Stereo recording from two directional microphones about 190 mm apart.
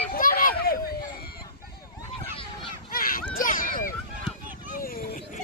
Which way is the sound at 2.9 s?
50° left (ahead or behind).